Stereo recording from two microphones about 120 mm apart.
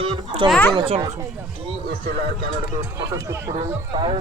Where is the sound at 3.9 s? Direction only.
40° right (ahead or behind).